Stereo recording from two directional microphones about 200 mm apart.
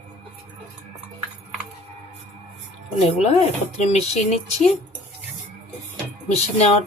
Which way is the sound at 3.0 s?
30° left (ahead or behind).